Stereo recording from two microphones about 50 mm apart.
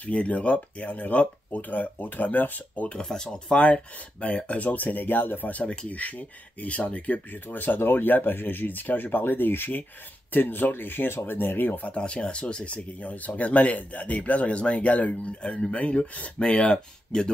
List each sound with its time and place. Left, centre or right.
0.0 s speech: left
2.9 s speech: centre
7.4 s speech: left
11.8 s speech: left